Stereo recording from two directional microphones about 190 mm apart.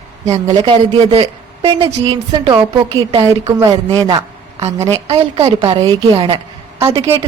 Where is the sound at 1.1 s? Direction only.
30° right (ahead or behind).